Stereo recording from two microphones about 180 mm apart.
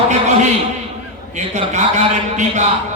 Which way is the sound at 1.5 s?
40° right (ahead or behind).